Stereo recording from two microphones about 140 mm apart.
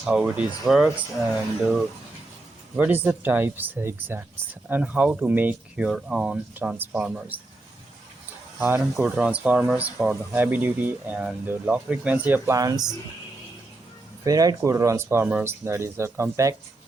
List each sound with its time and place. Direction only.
0.0 s speech: 5° right (ahead or behind)
2.7 s speech: 10° right (ahead or behind)
8.5 s speech: 15° right (ahead or behind)
12.5 s speech: 25° right (ahead or behind)
14.3 s speech: 25° right (ahead or behind)